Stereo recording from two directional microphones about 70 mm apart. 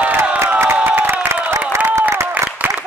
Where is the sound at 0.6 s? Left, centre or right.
Right.